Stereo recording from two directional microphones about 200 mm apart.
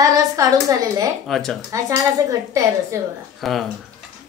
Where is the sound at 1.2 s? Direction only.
Centre (ahead or behind).